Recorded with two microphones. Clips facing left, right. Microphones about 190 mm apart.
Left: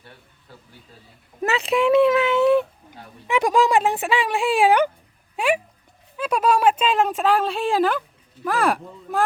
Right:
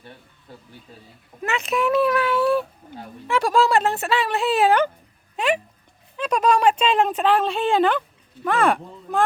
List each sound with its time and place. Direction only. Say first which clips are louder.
1.5 s speech: left 3 dB; 30° left (ahead or behind); by 9.2 s centre (ahead or behind)